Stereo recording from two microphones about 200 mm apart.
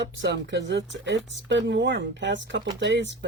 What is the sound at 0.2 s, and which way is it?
Speech, 60° right (ahead or behind).